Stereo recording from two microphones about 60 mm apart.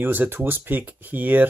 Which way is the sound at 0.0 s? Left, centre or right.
Right.